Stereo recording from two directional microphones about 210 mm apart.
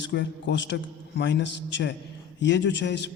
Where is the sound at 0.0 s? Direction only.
55° left (ahead or behind).